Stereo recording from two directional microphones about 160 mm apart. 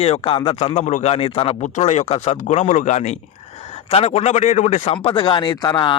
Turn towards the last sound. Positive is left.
turn(degrees=30)  # may be behind; listen again after turning